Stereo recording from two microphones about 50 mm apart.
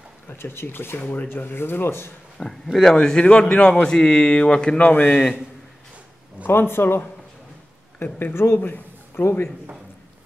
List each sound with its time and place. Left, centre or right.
0.3 s speech: left
2.3 s a man's voice: centre
4.9 s a man's voice: left
6.4 s speech: left
8.5 s a man's voice: left
9.1 s a man's voice: left